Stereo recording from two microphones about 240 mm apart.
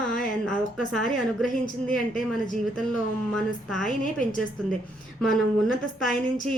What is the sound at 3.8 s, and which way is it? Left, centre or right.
Speech, left.